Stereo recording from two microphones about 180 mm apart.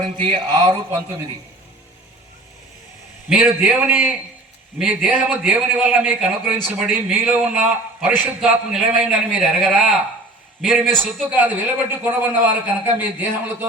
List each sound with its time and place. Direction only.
0.0 s speech: 30° right (ahead or behind)
3.2 s a man's voice: centre (ahead or behind)
10.8 s a man's voice: 5° left (ahead or behind)
11.3 s a man's voice: 10° right (ahead or behind)